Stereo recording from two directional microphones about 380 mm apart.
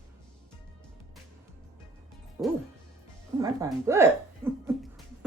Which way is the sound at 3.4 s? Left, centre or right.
Centre.